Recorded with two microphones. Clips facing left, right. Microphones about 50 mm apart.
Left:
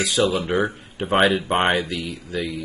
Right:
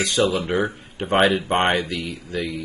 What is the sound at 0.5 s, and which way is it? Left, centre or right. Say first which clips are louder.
Speech: left 1 dB; left.